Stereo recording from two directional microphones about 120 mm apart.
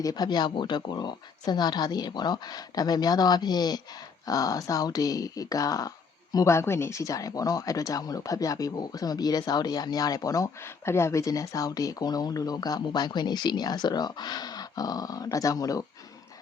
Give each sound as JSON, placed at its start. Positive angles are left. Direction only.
{"t": 0.0, "sound": "speech", "side_deg": 35}